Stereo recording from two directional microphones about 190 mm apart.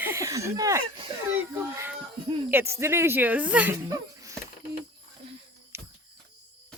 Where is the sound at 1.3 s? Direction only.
10° right (ahead or behind).